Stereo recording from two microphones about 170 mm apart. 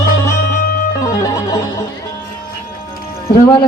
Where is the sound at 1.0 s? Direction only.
20° left (ahead or behind).